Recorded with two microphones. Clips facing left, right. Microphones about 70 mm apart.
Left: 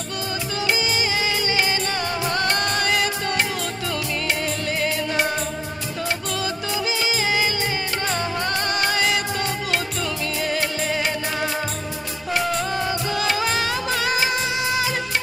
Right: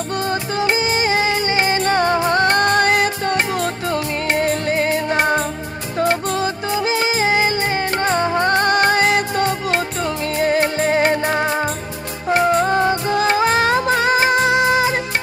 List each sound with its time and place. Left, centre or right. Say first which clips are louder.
0.3 s music: right 4 dB; right